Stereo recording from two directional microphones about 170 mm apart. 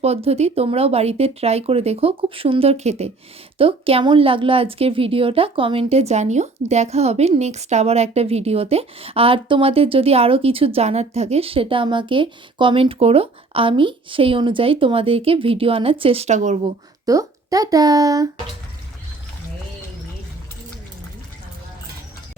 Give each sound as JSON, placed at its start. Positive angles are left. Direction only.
{"t": 0.0, "sound": "a woman's voice", "side_deg": -35}
{"t": 17.1, "sound": "speech", "side_deg": -20}